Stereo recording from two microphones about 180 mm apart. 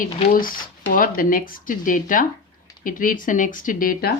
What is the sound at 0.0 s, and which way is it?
Speech, 50° left (ahead or behind).